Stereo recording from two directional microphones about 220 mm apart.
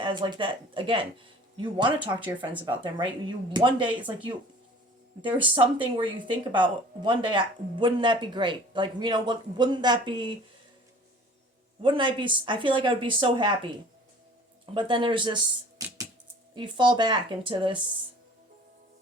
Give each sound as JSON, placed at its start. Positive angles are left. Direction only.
{"t": 0.0, "sound": "speech", "side_deg": -20}
{"t": 2.2, "sound": "speech", "side_deg": -5}
{"t": 2.6, "sound": "speech", "side_deg": -20}
{"t": 11.8, "sound": "speech", "side_deg": -20}
{"t": 14.7, "sound": "speech", "side_deg": -20}
{"t": 15.8, "sound": "a sound", "side_deg": -15}
{"t": 16.6, "sound": "speech", "side_deg": -20}